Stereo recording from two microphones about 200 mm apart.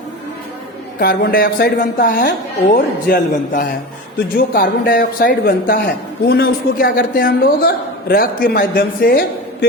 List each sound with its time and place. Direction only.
0.9 s a man's voice: 50° left (ahead or behind)